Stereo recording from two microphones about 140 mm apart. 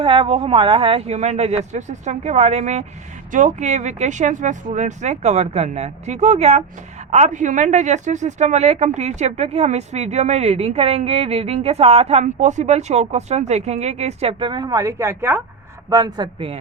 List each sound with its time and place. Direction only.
0.0 s speech: 40° right (ahead or behind); by 15.4 s 15° right (ahead or behind)
15.9 s a man's voice: 25° right (ahead or behind)